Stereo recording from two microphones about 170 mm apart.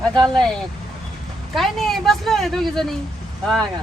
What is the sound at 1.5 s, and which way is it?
A woman's voice, centre (ahead or behind).